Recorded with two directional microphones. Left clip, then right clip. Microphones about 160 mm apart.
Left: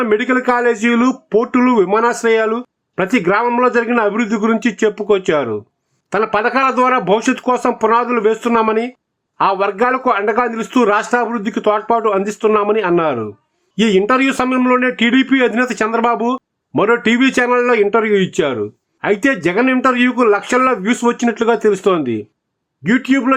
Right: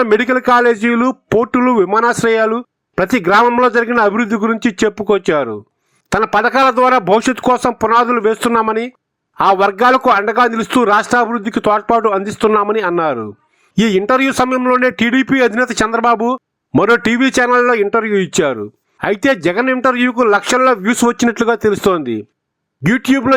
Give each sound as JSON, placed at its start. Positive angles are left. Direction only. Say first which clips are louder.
{"t": 0.0, "sound": "speech", "louder": "right 2 dB", "side_deg": -40}